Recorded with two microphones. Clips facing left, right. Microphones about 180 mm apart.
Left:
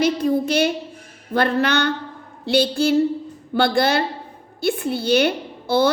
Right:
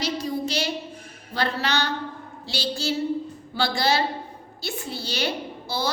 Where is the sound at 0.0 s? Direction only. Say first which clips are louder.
Left 8 dB; 55° left (ahead or behind).